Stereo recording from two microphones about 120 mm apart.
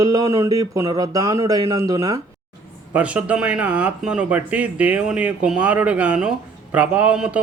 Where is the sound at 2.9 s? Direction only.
10° right (ahead or behind).